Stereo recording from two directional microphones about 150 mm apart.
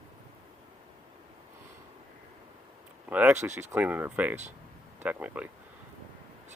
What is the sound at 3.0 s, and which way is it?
Speech, 10° right (ahead or behind).